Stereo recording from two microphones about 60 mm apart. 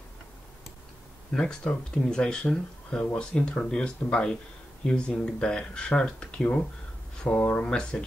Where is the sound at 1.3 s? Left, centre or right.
Centre.